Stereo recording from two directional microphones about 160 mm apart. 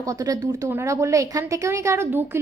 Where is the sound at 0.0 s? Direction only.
20° right (ahead or behind).